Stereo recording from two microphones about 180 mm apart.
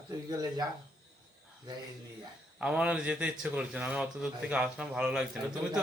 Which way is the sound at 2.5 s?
5° right (ahead or behind).